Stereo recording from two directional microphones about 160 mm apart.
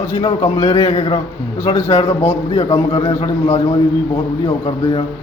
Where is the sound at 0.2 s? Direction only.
35° left (ahead or behind).